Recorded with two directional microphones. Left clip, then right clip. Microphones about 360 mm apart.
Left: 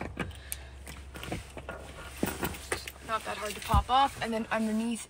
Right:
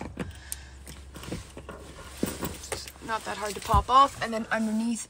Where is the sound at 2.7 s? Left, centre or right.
Centre.